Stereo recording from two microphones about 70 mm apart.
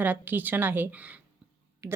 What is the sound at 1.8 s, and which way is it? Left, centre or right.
Speech, right.